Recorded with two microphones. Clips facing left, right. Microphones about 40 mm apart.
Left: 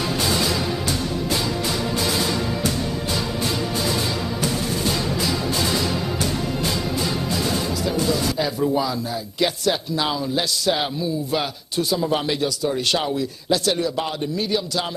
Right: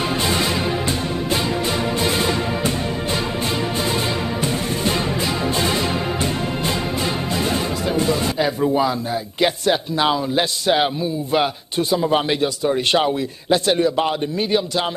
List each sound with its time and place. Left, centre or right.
0.2 s music: right
4.8 s music: right
8.1 s a sound: right
9.4 s a man's voice: right
11.9 s a man's voice: right